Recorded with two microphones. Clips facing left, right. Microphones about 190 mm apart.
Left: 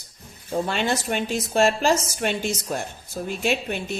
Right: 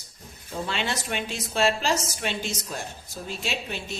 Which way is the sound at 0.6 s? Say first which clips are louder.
Left 3 dB; 45° left (ahead or behind).